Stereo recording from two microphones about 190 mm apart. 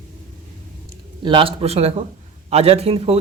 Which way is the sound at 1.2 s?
25° right (ahead or behind).